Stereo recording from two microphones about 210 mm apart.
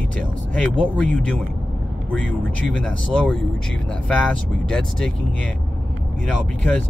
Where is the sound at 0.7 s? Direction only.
5° left (ahead or behind).